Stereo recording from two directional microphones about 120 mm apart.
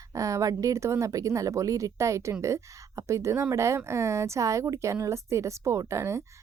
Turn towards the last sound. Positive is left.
turn(degrees=-25)  # may be behind; listen again after turning